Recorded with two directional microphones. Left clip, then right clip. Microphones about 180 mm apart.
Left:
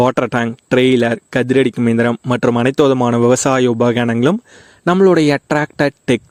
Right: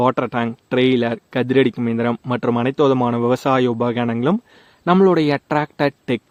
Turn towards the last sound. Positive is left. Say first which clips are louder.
# left 4 dB
turn(degrees=40)  # may be behind; listen again after turning